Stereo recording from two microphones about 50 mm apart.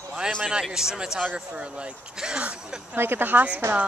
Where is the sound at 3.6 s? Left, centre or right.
Right.